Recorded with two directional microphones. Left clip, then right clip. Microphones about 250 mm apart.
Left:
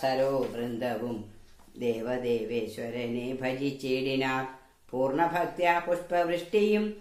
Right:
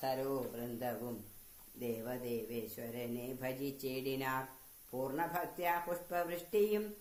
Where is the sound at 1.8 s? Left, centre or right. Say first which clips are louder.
Left 11 dB; right.